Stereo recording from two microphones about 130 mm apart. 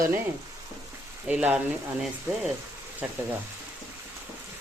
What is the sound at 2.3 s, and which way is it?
Speech, 20° right (ahead or behind).